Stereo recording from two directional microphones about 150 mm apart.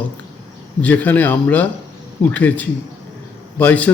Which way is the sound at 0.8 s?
10° left (ahead or behind).